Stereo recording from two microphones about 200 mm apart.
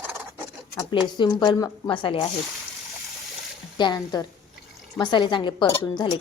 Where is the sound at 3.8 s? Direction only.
20° left (ahead or behind).